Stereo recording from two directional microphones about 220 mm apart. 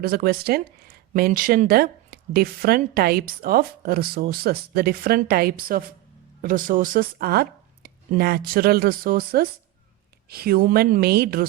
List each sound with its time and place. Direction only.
0.0 s a woman's voice: 45° right (ahead or behind)